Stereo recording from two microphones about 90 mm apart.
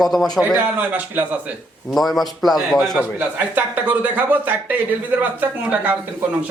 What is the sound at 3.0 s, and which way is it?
A man's voice, 15° right (ahead or behind).